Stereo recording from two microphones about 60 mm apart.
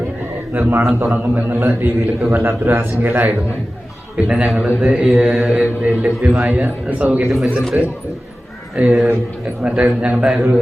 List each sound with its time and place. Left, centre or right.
0.5 s a man's voice: right
4.2 s a man's voice: centre